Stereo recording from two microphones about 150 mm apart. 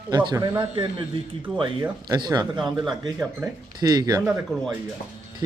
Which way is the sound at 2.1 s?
30° right (ahead or behind).